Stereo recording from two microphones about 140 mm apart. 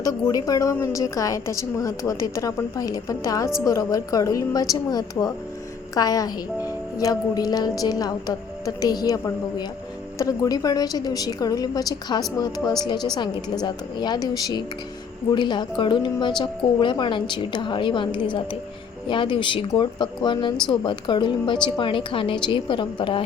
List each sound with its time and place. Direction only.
0.0 s a woman's voice: 25° left (ahead or behind)